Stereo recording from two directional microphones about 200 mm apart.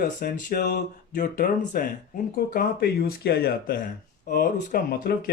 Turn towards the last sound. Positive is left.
turn(degrees=50)  # may be behind; listen again after turning